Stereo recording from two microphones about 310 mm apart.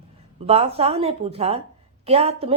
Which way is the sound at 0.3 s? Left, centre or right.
Centre.